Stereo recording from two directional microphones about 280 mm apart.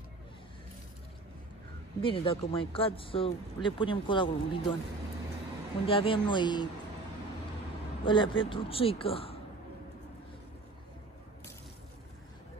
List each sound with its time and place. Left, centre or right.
2.0 s speech: centre
5.9 s speech: centre
8.0 s speech: centre